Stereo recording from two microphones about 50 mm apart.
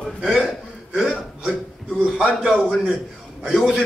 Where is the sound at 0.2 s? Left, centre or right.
Centre.